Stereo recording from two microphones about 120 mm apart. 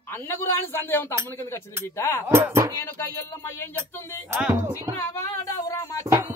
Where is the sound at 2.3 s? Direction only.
25° right (ahead or behind).